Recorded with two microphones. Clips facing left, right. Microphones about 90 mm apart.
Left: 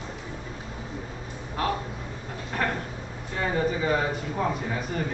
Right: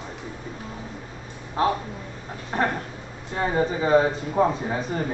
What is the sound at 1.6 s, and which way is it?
Speech, 25° right (ahead or behind).